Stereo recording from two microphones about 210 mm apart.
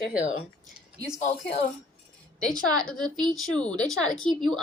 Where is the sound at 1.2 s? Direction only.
35° left (ahead or behind).